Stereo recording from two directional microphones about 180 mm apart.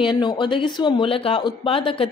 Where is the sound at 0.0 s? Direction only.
25° left (ahead or behind).